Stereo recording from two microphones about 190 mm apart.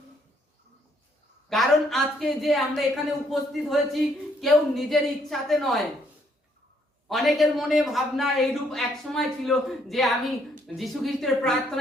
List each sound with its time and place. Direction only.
1.5 s a man's voice: centre (ahead or behind)
7.1 s a man's voice: centre (ahead or behind)